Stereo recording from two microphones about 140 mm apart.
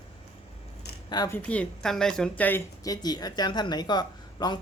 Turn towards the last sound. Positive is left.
turn(degrees=30)  # may be behind; listen again after turning